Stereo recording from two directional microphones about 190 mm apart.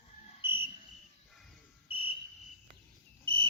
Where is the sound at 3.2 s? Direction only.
30° right (ahead or behind).